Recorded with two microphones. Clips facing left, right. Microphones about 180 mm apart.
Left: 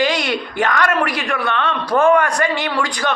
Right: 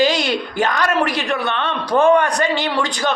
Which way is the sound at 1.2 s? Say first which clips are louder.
Even; 25° right (ahead or behind).